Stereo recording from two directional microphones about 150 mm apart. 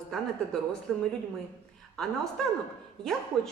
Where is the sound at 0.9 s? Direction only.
5° left (ahead or behind).